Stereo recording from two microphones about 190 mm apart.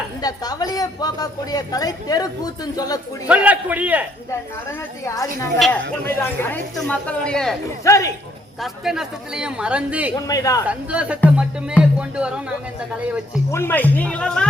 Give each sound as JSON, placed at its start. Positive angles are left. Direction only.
{"t": 0.2, "sound": "speech", "side_deg": 20}
{"t": 3.2, "sound": "a man's voice", "side_deg": -5}
{"t": 5.0, "sound": "speech", "side_deg": 15}
{"t": 5.5, "sound": "a woman's voice", "side_deg": 0}
{"t": 7.9, "sound": "speech", "side_deg": 15}
{"t": 8.6, "sound": "a woman's voice", "side_deg": 0}
{"t": 10.2, "sound": "speech", "side_deg": 20}
{"t": 10.7, "sound": "a woman's voice", "side_deg": -5}
{"t": 11.3, "sound": "music", "side_deg": -5}
{"t": 13.5, "sound": "speech", "side_deg": 10}